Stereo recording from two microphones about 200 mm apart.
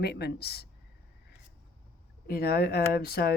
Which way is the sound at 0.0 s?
55° left (ahead or behind).